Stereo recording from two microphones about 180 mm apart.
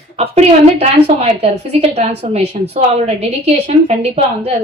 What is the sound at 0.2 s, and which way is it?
A woman's voice, 35° right (ahead or behind).